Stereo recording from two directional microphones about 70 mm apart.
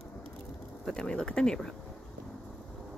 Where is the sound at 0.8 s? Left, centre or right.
Centre.